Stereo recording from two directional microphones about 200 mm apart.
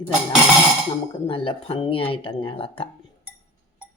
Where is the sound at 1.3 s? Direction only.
25° left (ahead or behind).